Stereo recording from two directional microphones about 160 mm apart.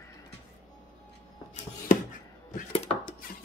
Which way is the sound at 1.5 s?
55° left (ahead or behind).